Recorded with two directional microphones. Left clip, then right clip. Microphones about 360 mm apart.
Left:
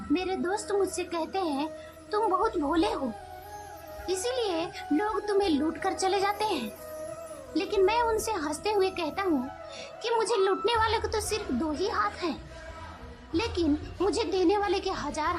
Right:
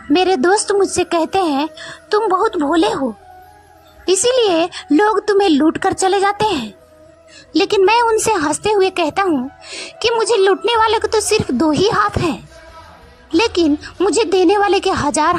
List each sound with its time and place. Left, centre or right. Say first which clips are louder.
0.1 s speech: right 16 dB; right
4.0 s speech: right 16 dB; right